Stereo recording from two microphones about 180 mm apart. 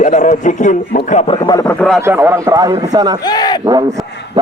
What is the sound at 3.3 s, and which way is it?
Speech, 20° left (ahead or behind).